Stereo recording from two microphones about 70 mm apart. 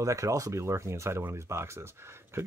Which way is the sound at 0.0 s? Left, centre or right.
Right.